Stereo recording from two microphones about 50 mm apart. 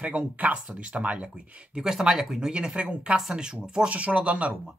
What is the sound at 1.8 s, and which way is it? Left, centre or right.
Speech, centre.